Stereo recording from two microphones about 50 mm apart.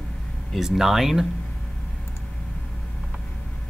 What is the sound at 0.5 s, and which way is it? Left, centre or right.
Speech, centre.